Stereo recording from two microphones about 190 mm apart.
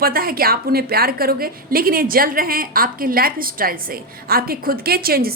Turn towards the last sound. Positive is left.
turn(degrees=-55)  # may be behind; listen again after turning